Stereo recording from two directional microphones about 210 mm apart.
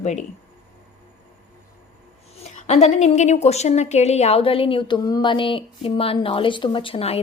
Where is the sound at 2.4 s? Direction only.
30° left (ahead or behind).